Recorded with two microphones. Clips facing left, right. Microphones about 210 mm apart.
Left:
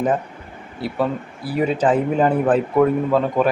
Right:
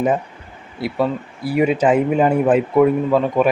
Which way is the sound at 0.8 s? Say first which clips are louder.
Right 2 dB; 10° right (ahead or behind).